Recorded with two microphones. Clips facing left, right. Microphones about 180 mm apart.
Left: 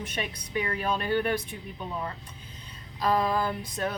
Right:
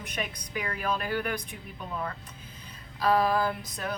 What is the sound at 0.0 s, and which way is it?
Speech, 30° left (ahead or behind).